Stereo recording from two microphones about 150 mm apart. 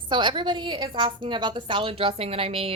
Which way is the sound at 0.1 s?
30° right (ahead or behind).